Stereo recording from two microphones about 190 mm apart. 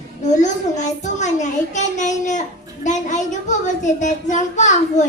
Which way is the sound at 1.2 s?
40° left (ahead or behind).